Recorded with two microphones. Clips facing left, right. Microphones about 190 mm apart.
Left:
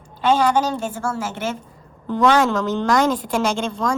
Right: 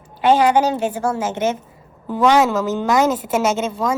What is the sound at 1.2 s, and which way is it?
Speech, 20° right (ahead or behind).